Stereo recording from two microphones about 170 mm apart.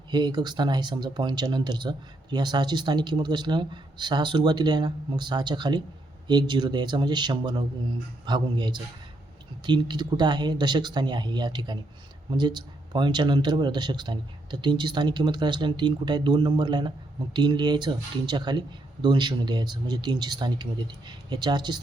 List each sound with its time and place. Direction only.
0.1 s speech: 25° right (ahead or behind)